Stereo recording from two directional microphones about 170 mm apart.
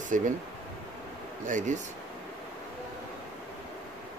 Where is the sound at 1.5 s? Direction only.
50° right (ahead or behind).